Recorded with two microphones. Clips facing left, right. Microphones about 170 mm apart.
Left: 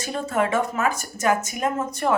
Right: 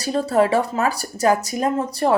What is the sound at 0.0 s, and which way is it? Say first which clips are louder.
Speech: right 6 dB; 35° right (ahead or behind).